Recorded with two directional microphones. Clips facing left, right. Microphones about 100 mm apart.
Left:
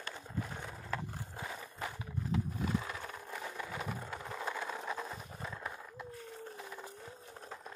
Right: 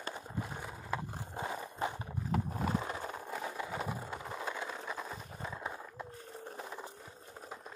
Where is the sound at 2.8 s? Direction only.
25° right (ahead or behind).